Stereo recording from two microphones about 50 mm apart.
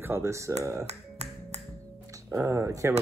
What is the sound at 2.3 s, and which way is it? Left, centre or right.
Speech, right.